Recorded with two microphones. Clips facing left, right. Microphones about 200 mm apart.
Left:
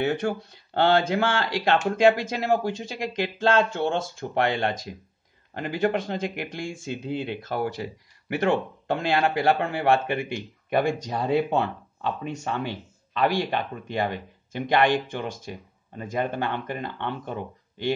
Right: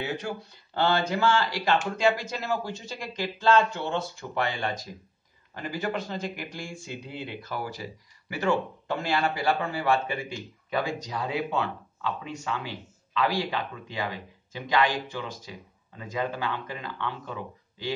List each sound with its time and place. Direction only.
0.0 s a man's voice: 70° left (ahead or behind)